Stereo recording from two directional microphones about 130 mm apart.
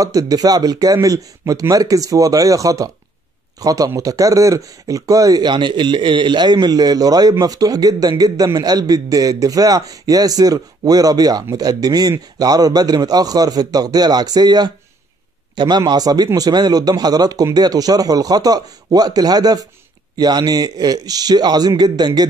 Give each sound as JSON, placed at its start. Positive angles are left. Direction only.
{"t": 0.0, "sound": "a man's voice", "side_deg": -25}